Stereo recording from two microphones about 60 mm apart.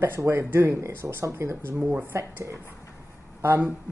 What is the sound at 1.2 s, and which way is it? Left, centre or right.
Speech, right.